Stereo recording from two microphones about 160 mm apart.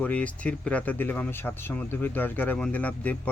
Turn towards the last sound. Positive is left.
turn(degrees=10)  # may be behind; listen again after turning